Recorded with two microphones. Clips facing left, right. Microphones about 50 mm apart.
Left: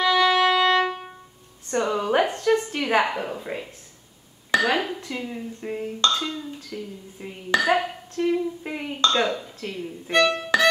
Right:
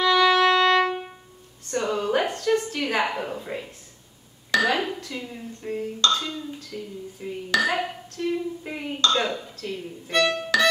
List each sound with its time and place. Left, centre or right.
0.0 s music: centre
1.7 s a sound: centre
4.6 s speech: centre
5.0 s speech: centre
8.2 s humming: left
8.6 s speech: centre
9.6 s humming: left
10.5 s violin: left